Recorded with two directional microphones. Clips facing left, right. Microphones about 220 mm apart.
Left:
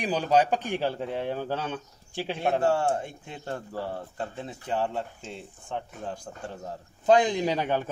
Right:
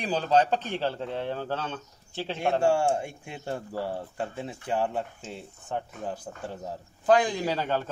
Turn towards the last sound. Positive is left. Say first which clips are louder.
# left 2 dB
turn(degrees=15)  # may be behind; listen again after turning